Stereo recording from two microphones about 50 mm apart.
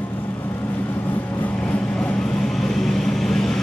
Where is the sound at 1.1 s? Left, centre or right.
Left.